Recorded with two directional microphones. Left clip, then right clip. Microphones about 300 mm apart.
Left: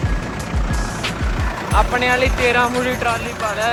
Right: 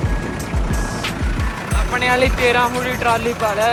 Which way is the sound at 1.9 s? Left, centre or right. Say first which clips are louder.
Even; centre.